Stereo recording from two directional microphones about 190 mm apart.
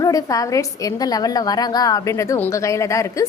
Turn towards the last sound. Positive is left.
turn(degrees=15)  # may be behind; listen again after turning